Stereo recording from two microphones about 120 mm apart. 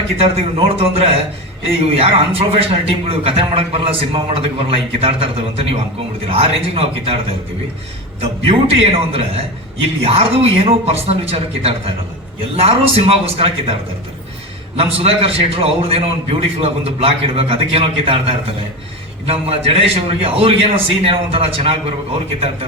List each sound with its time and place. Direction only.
0.2 s a man's voice: 55° right (ahead or behind)
14.8 s a man's voice: 55° right (ahead or behind)